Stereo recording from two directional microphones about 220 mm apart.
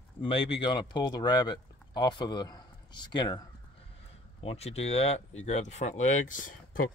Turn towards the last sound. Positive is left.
turn(degrees=40)  # may be behind; listen again after turning